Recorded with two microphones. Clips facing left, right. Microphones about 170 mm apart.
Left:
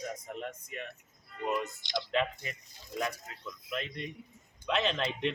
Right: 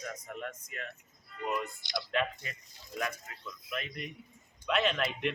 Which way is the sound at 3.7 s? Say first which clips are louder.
Left 2 dB; 25° left (ahead or behind).